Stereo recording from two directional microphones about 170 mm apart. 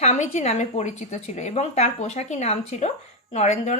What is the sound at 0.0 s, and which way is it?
A woman's voice, 40° left (ahead or behind).